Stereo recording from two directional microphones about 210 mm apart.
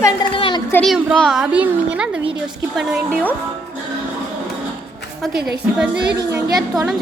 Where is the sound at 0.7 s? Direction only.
Centre (ahead or behind).